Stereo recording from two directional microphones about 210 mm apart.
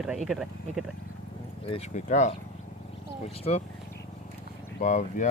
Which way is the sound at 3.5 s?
30° left (ahead or behind).